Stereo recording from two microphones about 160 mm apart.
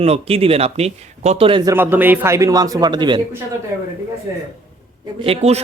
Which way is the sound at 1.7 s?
10° right (ahead or behind).